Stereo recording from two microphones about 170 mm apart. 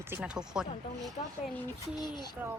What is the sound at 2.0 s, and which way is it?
Speech, 25° left (ahead or behind).